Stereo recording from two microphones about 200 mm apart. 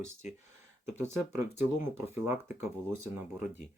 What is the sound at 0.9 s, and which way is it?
Speech, 10° right (ahead or behind).